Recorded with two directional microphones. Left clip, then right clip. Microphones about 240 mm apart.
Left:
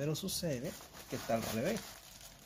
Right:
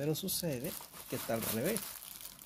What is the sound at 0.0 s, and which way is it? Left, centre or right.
Speech, centre.